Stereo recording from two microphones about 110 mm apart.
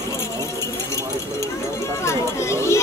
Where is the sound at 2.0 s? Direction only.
25° left (ahead or behind).